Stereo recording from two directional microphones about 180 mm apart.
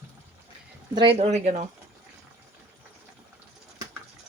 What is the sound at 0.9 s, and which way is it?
Speech, 25° right (ahead or behind).